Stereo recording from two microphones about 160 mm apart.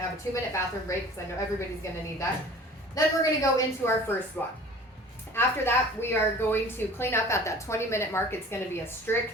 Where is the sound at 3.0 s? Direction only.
20° left (ahead or behind).